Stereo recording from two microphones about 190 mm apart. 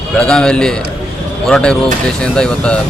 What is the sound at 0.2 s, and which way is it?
A man's voice, 5° left (ahead or behind).